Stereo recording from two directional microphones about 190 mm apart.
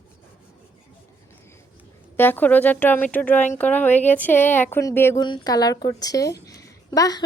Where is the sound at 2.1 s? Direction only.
10° left (ahead or behind).